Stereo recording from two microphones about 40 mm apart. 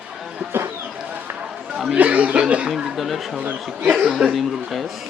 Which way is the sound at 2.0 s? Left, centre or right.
Right.